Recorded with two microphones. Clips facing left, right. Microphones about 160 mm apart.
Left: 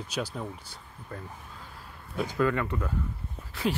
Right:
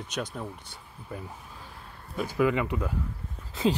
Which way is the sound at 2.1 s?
10° right (ahead or behind).